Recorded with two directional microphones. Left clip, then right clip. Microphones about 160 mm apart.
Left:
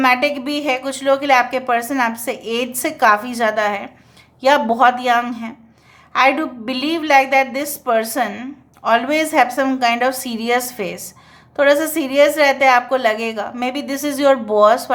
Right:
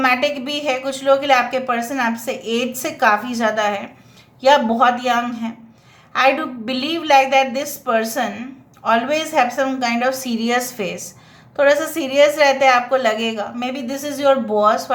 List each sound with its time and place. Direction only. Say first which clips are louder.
0.0 s a woman's voice: left 2 dB; 30° left (ahead or behind)